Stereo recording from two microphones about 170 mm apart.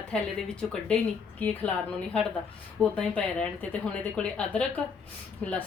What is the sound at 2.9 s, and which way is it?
A woman's voice, 5° left (ahead or behind).